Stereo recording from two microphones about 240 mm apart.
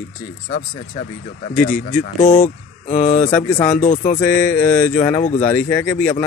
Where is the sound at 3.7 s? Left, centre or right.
Left.